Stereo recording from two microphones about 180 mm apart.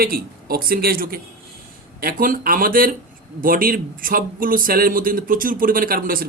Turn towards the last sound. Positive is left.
turn(degrees=-50)  # may be behind; listen again after turning